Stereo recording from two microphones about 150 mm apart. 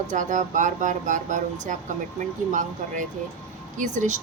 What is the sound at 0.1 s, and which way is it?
A woman's voice, 55° right (ahead or behind).